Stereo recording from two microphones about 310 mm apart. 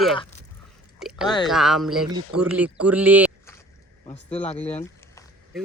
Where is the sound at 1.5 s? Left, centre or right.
Centre.